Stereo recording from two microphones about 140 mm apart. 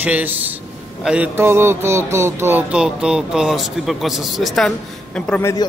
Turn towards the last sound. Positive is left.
turn(degrees=20)  # may be behind; listen again after turning